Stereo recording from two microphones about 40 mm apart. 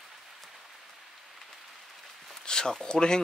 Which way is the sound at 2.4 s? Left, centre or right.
Centre.